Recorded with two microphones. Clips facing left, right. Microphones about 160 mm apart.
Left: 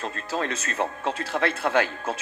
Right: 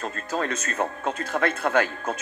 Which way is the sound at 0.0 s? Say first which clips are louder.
Right 1 dB; 45° right (ahead or behind).